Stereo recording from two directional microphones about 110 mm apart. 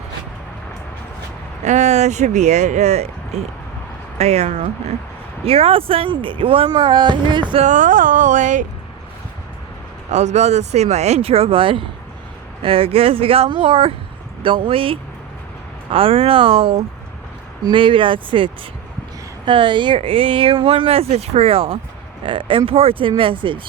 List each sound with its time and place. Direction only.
1.6 s speech: 90° right; by 6.7 s 55° right (ahead or behind)
6.7 s speech: 40° right (ahead or behind)
10.1 s speech: 90° right; by 23.6 s 50° right (ahead or behind)